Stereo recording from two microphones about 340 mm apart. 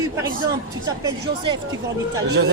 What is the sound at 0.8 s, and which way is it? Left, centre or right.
Speech, centre.